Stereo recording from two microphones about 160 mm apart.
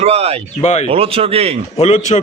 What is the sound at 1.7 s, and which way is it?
Speech, 40° left (ahead or behind).